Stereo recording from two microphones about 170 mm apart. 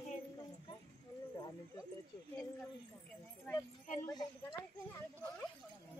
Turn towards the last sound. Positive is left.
turn(degrees=25)  # may be behind; listen again after turning